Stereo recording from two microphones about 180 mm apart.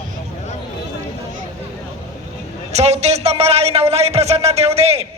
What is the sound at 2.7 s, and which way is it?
A man's voice, 35° right (ahead or behind).